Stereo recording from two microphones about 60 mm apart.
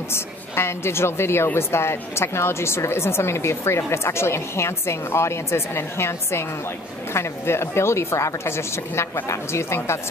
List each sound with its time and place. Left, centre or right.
0.1 s a woman's voice: left